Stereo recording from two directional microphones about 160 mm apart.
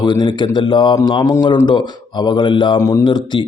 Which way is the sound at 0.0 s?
30° left (ahead or behind).